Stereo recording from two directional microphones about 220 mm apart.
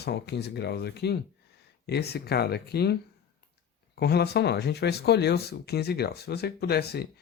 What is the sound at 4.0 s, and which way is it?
Speech, 45° left (ahead or behind).